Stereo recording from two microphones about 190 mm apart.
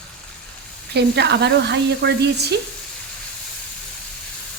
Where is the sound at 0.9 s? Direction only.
60° right (ahead or behind).